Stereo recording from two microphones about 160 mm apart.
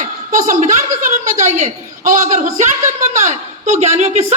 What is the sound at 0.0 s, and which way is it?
A woman's voice, 55° right (ahead or behind).